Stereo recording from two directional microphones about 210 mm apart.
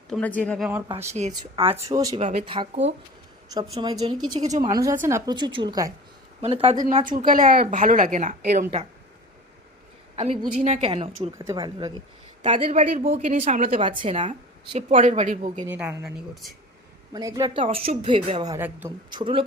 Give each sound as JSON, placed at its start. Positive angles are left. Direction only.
{"t": 0.1, "sound": "speech", "side_deg": 5}
{"t": 1.4, "sound": "a woman's voice", "side_deg": -25}
{"t": 2.1, "sound": "speech", "side_deg": -30}
{"t": 3.5, "sound": "speech", "side_deg": -20}
{"t": 4.4, "sound": "a woman's voice", "side_deg": -35}
{"t": 4.6, "sound": "a woman's voice", "side_deg": -15}
{"t": 6.8, "sound": "a woman's voice", "side_deg": -40}
{"t": 10.2, "sound": "speech", "side_deg": -30}
{"t": 12.4, "sound": "a woman's voice", "side_deg": -30}
{"t": 15.6, "sound": "a woman's voice", "side_deg": -10}
{"t": 16.3, "sound": "speech", "side_deg": 0}
{"t": 17.1, "sound": "speech", "side_deg": -20}
{"t": 18.5, "sound": "a woman's voice", "side_deg": -10}
{"t": 19.1, "sound": "speech", "side_deg": -25}